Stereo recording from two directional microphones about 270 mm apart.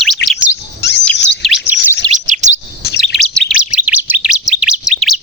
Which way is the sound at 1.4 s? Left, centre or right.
Centre.